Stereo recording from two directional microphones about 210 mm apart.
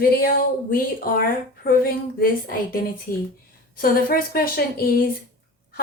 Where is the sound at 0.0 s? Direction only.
45° left (ahead or behind).